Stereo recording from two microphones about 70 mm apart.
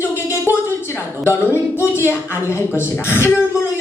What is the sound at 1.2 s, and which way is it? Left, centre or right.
A woman's voice, left.